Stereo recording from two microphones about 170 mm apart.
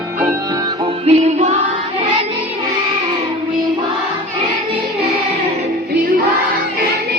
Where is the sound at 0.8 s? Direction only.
40° right (ahead or behind).